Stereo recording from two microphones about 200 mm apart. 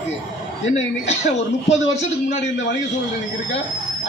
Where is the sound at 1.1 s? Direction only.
35° left (ahead or behind).